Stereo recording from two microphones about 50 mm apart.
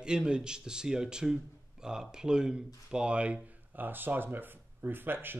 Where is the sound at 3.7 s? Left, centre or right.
Right.